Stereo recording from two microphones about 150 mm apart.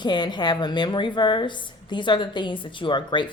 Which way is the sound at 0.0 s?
30° left (ahead or behind).